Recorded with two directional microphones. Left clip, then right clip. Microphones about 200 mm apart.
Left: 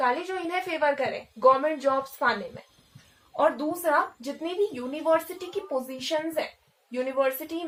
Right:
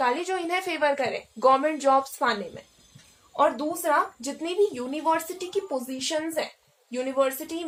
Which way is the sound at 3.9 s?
40° right (ahead or behind).